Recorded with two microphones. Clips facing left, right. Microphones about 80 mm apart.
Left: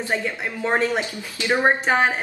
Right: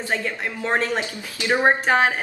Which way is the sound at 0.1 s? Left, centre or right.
Centre.